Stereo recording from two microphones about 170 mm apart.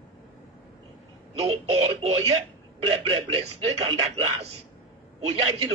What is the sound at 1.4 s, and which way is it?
Speech, 35° right (ahead or behind).